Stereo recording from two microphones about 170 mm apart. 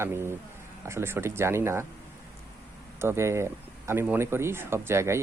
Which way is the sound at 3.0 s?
15° right (ahead or behind).